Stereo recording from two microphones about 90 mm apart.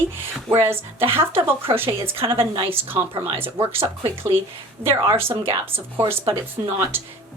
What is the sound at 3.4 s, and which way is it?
Speech, 25° right (ahead or behind).